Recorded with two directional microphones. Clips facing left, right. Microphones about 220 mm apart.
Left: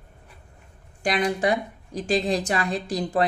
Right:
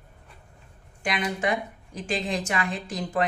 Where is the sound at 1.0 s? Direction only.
35° left (ahead or behind).